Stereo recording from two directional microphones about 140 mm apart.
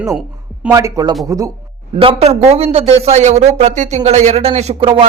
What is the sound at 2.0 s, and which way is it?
A man's voice, 45° right (ahead or behind).